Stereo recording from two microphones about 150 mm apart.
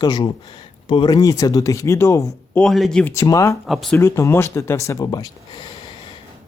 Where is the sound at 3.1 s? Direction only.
20° left (ahead or behind).